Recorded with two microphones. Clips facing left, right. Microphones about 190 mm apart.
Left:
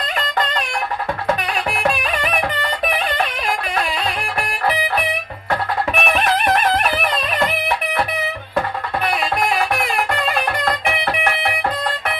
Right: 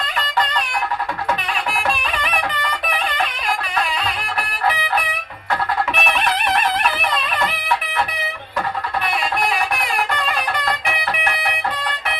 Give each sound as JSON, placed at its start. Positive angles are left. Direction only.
{"t": 1.7, "sound": "music", "side_deg": 45}
{"t": 5.9, "sound": "music", "side_deg": 45}